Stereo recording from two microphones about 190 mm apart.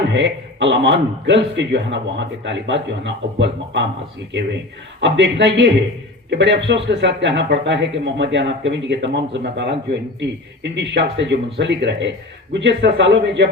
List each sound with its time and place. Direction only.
0.1 s a man's voice: 70° right (ahead or behind)
4.9 s a man's voice: 70° right (ahead or behind)